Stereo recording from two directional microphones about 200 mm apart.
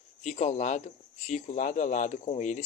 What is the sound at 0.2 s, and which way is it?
Speech, 35° left (ahead or behind).